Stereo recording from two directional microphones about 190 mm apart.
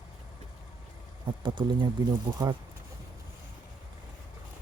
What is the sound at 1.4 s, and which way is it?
Speech, 25° right (ahead or behind).